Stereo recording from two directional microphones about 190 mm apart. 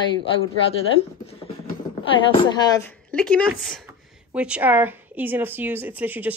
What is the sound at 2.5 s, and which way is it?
Speech, 20° left (ahead or behind).